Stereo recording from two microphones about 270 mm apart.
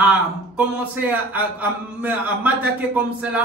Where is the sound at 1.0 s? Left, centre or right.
Centre.